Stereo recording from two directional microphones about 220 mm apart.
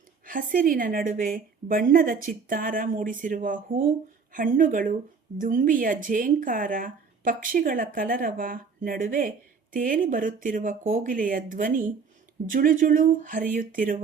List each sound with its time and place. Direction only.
0.3 s speech: 40° right (ahead or behind)